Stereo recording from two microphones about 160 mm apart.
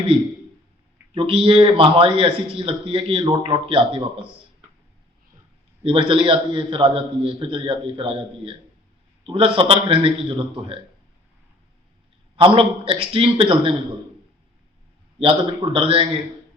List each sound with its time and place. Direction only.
1.1 s a man's voice: 35° right (ahead or behind)
5.8 s a man's voice: 35° right (ahead or behind)
12.5 s a man's voice: 35° right (ahead or behind)
15.2 s a man's voice: 35° right (ahead or behind)